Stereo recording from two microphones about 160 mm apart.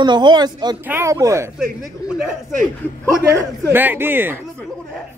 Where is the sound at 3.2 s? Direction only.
20° right (ahead or behind).